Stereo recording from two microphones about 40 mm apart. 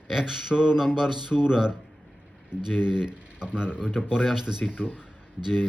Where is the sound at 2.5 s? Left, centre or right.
Right.